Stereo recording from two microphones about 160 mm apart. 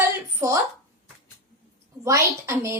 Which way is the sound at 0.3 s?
20° right (ahead or behind).